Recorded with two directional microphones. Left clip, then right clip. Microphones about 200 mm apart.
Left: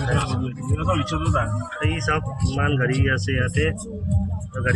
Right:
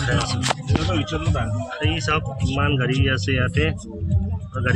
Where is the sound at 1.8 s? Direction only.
10° right (ahead or behind).